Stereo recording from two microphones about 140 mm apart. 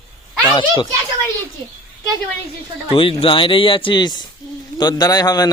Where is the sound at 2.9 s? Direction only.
40° left (ahead or behind).